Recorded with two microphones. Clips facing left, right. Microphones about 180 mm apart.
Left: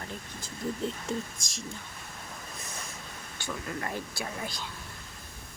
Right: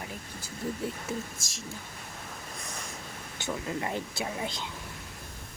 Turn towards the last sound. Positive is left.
turn(degrees=-20)  # may be behind; listen again after turning